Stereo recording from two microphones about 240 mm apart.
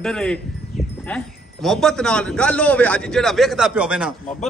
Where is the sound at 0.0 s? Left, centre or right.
Centre.